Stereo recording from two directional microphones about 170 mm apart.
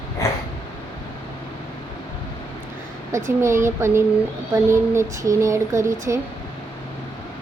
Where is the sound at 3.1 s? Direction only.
15° right (ahead or behind).